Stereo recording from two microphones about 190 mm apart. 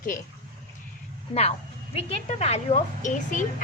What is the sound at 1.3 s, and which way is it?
A woman's voice, 30° left (ahead or behind).